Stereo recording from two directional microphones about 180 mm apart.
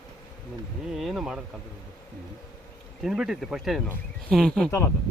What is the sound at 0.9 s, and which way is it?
Speech, centre (ahead or behind).